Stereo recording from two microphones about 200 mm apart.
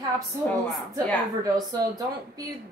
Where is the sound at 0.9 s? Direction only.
20° right (ahead or behind).